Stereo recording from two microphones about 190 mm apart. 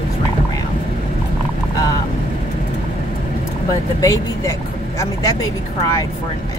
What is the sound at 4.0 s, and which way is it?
Speech, 15° left (ahead or behind).